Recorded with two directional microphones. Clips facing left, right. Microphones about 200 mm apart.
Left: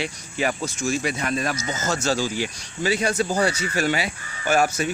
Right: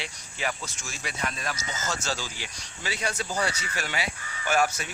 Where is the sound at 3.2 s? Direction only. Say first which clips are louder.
Left 7 dB; 45° left (ahead or behind).